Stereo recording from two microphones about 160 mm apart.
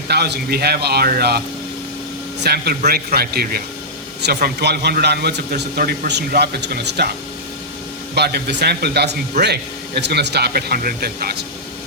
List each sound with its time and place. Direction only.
0.1 s a man's voice: 85° right
2.4 s a man's voice: 85° right
8.1 s a man's voice: 90° right; by 11.4 s 75° right (ahead or behind)